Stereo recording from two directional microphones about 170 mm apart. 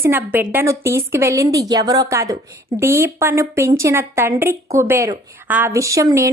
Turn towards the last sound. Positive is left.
turn(degrees=-20)  # may be behind; listen again after turning